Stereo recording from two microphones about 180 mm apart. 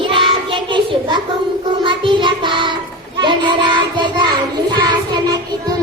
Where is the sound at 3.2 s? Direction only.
25° right (ahead or behind).